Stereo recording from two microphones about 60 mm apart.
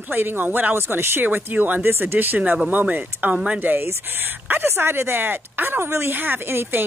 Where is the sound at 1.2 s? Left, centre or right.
Right.